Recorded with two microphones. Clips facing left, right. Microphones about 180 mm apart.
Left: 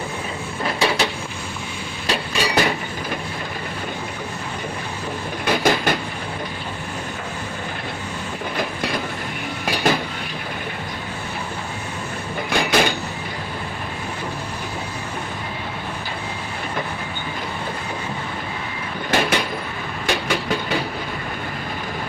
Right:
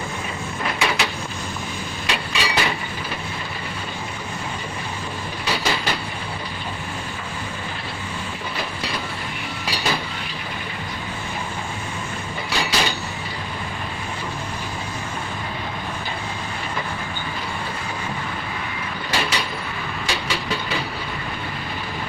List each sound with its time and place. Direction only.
0.6 s a sound: 35° left (ahead or behind)
2.0 s a sound: 45° left (ahead or behind)
5.5 s train: 50° left (ahead or behind)
8.5 s train: 50° left (ahead or behind)
12.5 s train: 55° left (ahead or behind)
19.1 s vehicle: 50° left (ahead or behind)